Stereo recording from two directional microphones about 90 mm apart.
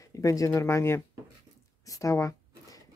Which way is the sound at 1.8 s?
40° left (ahead or behind).